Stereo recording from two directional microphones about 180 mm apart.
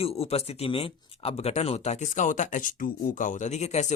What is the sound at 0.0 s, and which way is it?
Speech, 35° left (ahead or behind).